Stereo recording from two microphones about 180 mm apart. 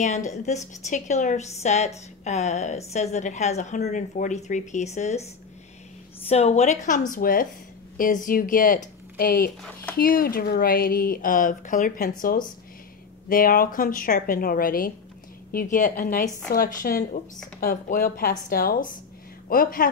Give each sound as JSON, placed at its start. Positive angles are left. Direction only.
{"t": 0.0, "sound": "speech", "side_deg": 40}
{"t": 6.2, "sound": "a woman's voice", "side_deg": 35}